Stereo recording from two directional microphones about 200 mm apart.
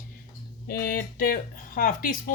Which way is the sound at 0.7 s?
45° left (ahead or behind).